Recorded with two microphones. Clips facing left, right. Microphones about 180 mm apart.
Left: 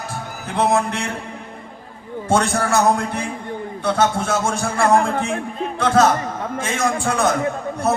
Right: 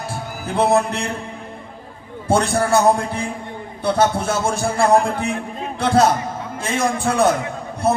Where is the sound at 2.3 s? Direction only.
30° right (ahead or behind).